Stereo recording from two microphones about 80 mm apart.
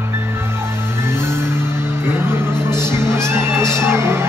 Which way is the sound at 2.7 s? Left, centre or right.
Right.